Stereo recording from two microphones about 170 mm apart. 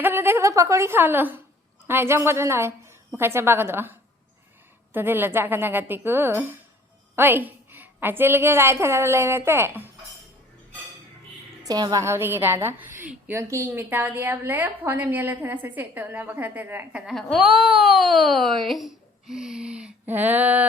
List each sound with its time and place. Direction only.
0.0 s a woman's voice: 15° right (ahead or behind)
4.9 s a woman's voice: 10° right (ahead or behind)
11.6 s a woman's voice: 20° right (ahead or behind)
17.1 s a woman's voice: centre (ahead or behind)